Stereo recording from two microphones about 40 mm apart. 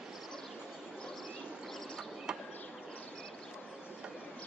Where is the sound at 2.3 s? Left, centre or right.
Centre.